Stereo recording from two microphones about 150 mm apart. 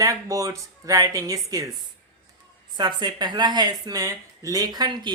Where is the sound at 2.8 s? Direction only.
30° right (ahead or behind).